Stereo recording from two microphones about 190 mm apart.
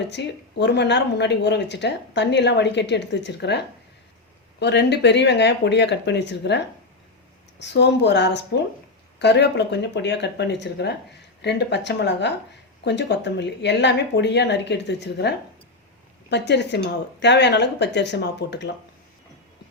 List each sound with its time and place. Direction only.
0.0 s speech: 65° left (ahead or behind)
4.6 s speech: 60° left (ahead or behind)
7.6 s speech: 65° left (ahead or behind)